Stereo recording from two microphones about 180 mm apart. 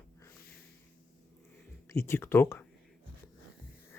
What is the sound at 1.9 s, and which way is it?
Speech, 15° left (ahead or behind).